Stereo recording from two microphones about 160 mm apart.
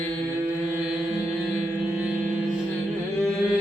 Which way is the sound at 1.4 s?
15° left (ahead or behind).